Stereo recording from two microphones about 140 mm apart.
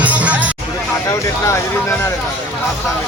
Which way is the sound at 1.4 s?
20° left (ahead or behind).